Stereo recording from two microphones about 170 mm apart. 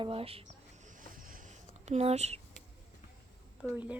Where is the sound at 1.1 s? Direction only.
55° right (ahead or behind).